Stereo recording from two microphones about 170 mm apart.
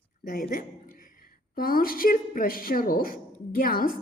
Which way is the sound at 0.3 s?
55° left (ahead or behind).